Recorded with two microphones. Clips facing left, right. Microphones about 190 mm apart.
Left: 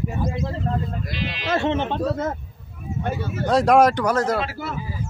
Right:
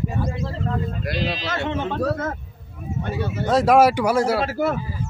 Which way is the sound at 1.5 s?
30° left (ahead or behind).